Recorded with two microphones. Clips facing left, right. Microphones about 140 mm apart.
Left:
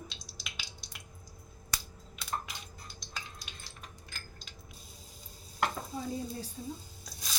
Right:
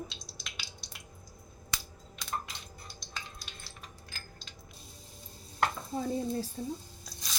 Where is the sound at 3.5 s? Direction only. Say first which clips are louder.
Right 1 dB; 15° left (ahead or behind).